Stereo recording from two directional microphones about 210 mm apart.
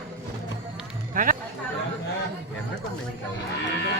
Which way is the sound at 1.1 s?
40° right (ahead or behind).